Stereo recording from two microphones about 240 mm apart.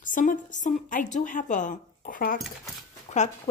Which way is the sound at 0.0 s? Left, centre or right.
Left.